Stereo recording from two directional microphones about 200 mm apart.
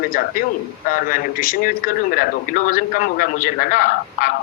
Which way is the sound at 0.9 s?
45° left (ahead or behind).